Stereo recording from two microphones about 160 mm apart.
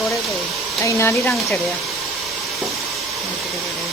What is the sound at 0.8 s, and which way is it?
Speech, 15° left (ahead or behind).